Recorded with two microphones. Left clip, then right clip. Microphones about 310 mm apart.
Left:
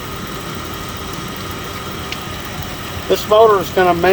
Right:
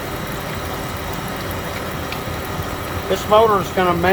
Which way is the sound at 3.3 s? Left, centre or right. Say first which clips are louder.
Left 3 dB; left.